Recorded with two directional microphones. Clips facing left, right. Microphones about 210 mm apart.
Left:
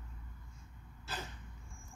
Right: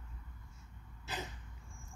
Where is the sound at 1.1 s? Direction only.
20° right (ahead or behind).